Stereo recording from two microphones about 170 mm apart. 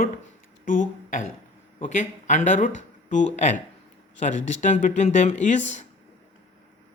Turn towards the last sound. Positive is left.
turn(degrees=45)  # may be behind; listen again after turning